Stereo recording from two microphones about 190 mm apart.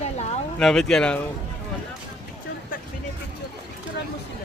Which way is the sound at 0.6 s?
5° left (ahead or behind).